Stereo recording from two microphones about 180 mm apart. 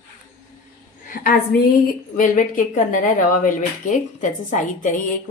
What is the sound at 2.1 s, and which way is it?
A woman's voice, 45° left (ahead or behind).